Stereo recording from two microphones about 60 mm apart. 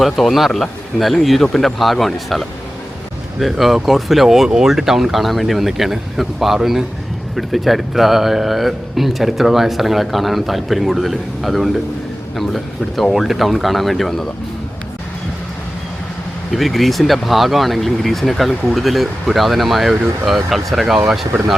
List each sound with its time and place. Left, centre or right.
0.0 s speech: centre
16.5 s speech: centre